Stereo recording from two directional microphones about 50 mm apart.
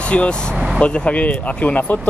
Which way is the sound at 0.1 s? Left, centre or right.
Left.